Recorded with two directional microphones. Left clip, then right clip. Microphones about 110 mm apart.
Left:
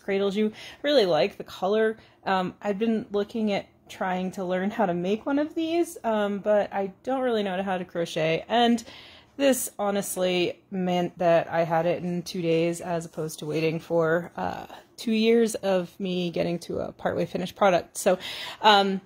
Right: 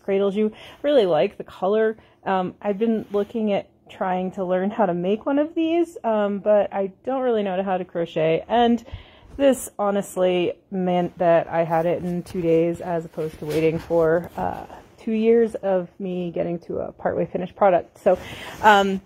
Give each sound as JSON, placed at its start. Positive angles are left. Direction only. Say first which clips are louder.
{"t": 0.0, "sound": "speech", "louder": "right 4 dB", "side_deg": -25}
{"t": 5.2, "sound": "speech", "louder": "right 5 dB", "side_deg": -30}
{"t": 12.4, "sound": "a woman's voice", "louder": "right 5 dB", "side_deg": -5}
{"t": 13.8, "sound": "speech", "louder": "right 5 dB", "side_deg": 10}
{"t": 18.1, "sound": "a woman's voice", "louder": "right 4 dB", "side_deg": 0}